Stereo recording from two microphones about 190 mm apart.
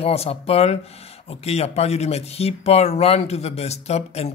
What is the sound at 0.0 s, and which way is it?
Speech, 30° left (ahead or behind).